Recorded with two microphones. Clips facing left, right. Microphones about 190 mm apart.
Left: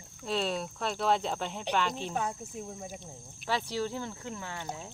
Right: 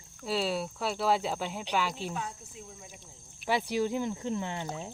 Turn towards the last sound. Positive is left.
turn(degrees=-20)  # may be behind; listen again after turning